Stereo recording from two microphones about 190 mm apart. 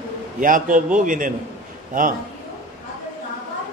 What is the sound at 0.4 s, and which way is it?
A man's voice, 45° right (ahead or behind).